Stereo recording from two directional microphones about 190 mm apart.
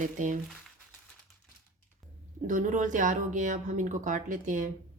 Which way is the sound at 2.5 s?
40° right (ahead or behind).